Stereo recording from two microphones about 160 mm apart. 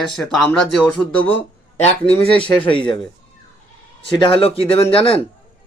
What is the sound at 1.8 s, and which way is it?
Speech, 40° left (ahead or behind).